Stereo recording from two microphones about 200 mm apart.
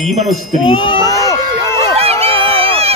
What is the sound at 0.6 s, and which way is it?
Speech, 25° left (ahead or behind).